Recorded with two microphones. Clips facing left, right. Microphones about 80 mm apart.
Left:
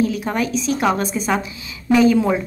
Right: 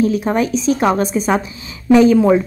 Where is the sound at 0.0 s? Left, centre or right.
Right.